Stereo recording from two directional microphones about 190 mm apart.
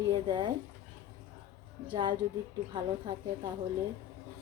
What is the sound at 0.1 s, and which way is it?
Speech, 20° right (ahead or behind).